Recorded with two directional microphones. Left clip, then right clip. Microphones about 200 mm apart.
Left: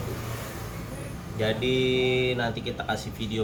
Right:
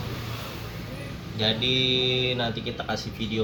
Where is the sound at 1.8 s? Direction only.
30° left (ahead or behind).